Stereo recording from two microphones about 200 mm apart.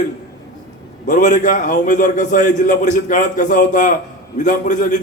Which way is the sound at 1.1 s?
40° left (ahead or behind).